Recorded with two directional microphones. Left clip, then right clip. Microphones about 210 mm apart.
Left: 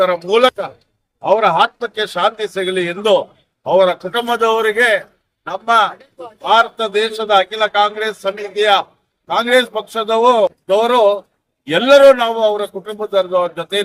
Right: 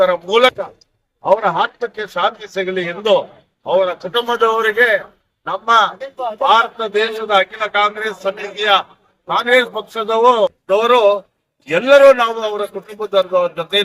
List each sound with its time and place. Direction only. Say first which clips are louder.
0.0 s a man's voice: even; 20° left (ahead or behind)
9.2 s a man's voice: even; 20° left (ahead or behind)